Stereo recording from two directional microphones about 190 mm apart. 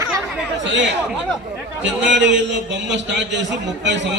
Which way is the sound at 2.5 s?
70° right (ahead or behind).